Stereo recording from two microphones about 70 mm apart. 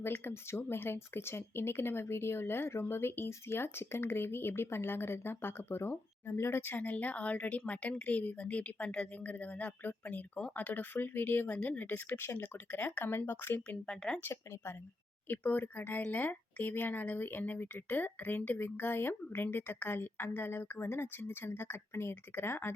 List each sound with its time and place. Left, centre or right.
0.0 s speech: left
13.7 s speech: centre
14.2 s speech: left